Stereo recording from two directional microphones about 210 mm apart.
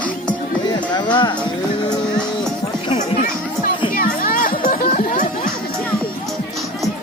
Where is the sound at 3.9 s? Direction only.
40° left (ahead or behind).